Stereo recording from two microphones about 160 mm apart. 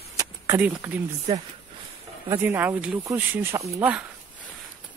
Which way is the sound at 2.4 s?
15° right (ahead or behind).